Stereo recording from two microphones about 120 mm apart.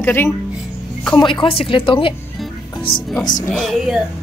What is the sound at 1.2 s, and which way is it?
Speech, 40° left (ahead or behind).